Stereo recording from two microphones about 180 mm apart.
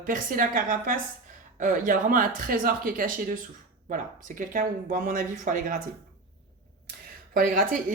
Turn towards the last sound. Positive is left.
turn(degrees=-50)  # may be behind; listen again after turning